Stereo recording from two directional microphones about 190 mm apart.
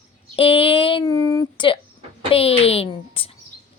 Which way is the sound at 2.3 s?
30° left (ahead or behind).